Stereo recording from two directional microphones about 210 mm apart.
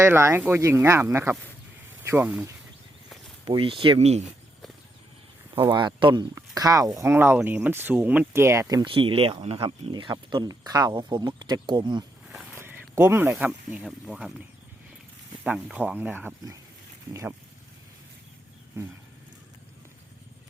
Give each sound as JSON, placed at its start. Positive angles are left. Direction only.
{"t": 0.0, "sound": "speech", "side_deg": -15}
{"t": 3.4, "sound": "speech", "side_deg": -25}
{"t": 5.5, "sound": "speech", "side_deg": -20}
{"t": 12.3, "sound": "walk", "side_deg": 0}
{"t": 12.5, "sound": "speech", "side_deg": -10}
{"t": 15.4, "sound": "speech", "side_deg": -5}